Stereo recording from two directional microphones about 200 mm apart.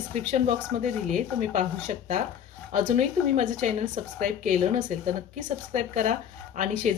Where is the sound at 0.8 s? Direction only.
40° right (ahead or behind).